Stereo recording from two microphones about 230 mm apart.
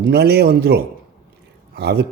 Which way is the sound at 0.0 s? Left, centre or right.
Right.